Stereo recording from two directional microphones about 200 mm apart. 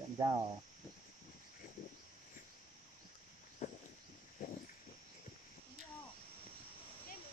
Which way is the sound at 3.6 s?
35° left (ahead or behind).